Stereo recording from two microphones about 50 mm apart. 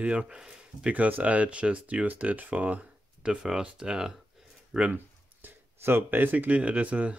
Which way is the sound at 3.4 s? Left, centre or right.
Centre.